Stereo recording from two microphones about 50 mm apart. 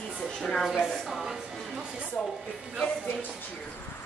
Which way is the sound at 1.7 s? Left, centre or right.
Centre.